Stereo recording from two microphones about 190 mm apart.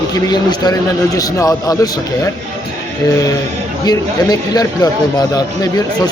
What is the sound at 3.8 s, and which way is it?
Speech, 20° left (ahead or behind).